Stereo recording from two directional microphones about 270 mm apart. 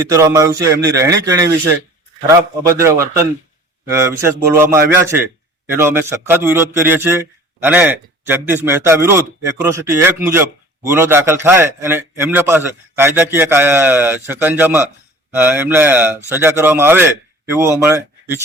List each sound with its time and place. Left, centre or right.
0.1 s a man's voice: centre